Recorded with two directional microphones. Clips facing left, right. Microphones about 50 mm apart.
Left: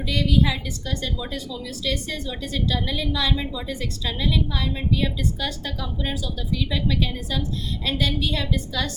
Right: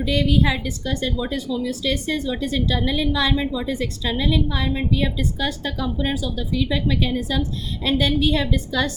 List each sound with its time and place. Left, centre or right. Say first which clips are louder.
0.0 s a woman's voice: right 3 dB; right